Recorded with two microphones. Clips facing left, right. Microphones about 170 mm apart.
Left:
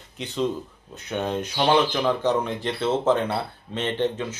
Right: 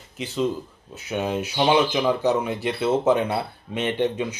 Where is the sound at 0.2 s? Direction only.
Centre (ahead or behind).